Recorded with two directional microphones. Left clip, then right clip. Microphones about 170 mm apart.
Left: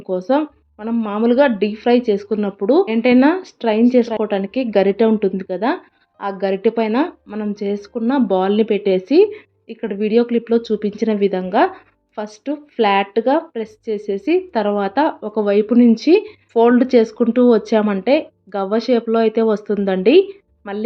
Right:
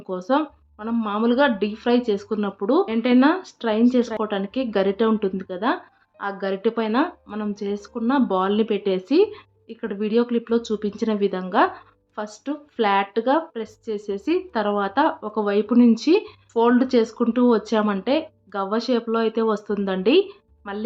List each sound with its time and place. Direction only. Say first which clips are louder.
0.1 s speech: left 5 dB; 15° left (ahead or behind)